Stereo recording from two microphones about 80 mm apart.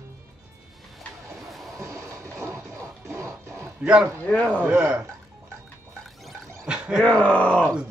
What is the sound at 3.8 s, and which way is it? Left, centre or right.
Speech, centre.